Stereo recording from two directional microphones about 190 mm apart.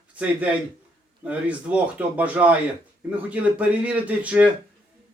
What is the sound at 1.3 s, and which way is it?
A man's voice, 5° right (ahead or behind).